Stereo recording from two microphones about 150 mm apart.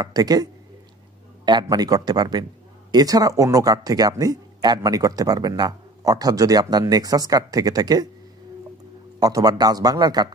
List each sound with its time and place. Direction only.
0.0 s speech: 25° right (ahead or behind)
9.2 s speech: 25° right (ahead or behind)